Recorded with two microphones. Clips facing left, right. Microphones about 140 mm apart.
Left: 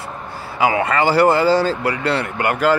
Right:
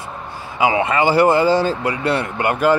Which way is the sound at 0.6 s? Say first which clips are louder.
Even; 20° right (ahead or behind).